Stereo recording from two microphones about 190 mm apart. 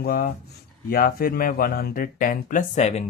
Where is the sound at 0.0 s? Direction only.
50° left (ahead or behind).